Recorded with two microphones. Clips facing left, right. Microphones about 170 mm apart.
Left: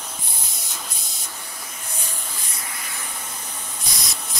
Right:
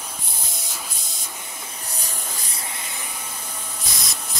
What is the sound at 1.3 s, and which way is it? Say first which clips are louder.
Spray: right 1 dB; 20° right (ahead or behind).